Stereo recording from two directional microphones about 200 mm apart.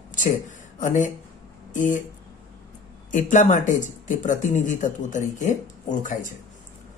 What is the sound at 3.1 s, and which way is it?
Speech, 40° left (ahead or behind).